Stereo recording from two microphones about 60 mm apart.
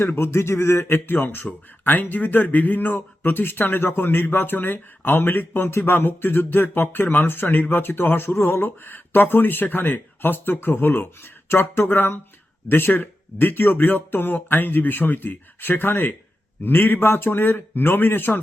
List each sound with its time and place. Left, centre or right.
0.0 s speech: left